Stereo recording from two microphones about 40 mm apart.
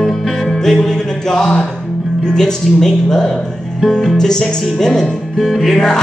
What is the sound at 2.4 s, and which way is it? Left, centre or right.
Speech, centre.